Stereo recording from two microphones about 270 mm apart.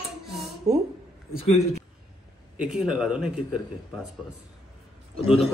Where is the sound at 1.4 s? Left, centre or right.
Left.